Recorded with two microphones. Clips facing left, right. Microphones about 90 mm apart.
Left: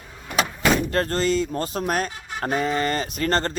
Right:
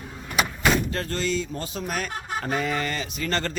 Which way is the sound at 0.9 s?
50° left (ahead or behind).